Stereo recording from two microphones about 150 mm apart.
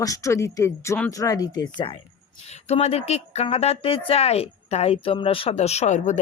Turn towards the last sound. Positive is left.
turn(degrees=55)  # may be behind; listen again after turning